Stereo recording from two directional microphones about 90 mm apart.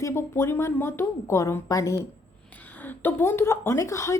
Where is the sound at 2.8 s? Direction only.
20° left (ahead or behind).